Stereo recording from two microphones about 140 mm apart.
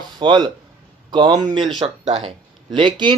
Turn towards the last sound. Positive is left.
turn(degrees=-35)  # may be behind; listen again after turning